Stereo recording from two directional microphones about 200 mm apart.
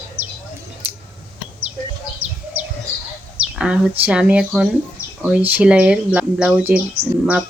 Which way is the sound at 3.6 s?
5° right (ahead or behind).